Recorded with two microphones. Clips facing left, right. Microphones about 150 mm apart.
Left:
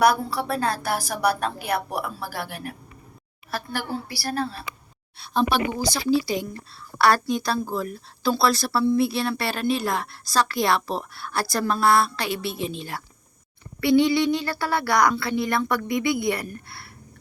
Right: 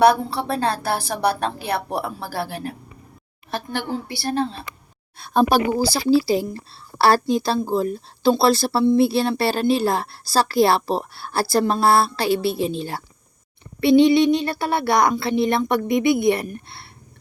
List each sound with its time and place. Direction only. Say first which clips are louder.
0.0 s speech: right 4 dB; 30° right (ahead or behind)
5.2 s speech: right 5 dB; 50° right (ahead or behind); by 16.8 s 25° right (ahead or behind)